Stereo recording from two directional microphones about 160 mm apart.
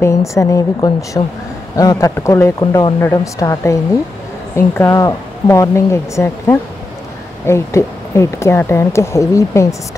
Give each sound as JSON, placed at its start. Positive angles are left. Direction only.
{"t": 0.0, "sound": "speech", "side_deg": 20}